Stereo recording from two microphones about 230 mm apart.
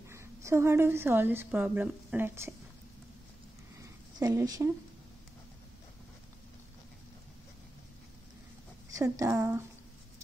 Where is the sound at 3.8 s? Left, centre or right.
Centre.